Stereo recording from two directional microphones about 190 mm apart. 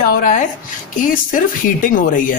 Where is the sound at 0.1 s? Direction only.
45° left (ahead or behind).